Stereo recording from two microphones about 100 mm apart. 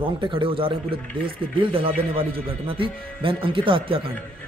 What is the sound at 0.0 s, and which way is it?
Speech, 60° right (ahead or behind).